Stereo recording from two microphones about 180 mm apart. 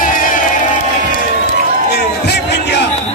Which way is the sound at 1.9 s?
65° left (ahead or behind).